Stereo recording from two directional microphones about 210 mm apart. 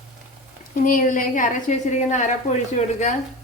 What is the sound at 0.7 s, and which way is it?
A woman's voice, 40° left (ahead or behind).